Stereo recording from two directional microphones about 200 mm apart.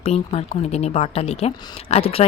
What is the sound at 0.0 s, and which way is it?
Speech, 30° left (ahead or behind).